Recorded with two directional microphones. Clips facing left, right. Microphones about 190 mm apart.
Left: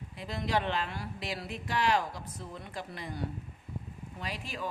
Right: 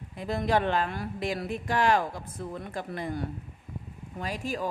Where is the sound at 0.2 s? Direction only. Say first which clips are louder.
Right 6 dB; 50° right (ahead or behind).